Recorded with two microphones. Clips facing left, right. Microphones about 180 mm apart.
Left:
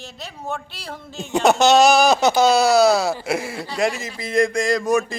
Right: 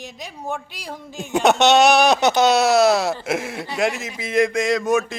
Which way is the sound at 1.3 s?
Centre (ahead or behind).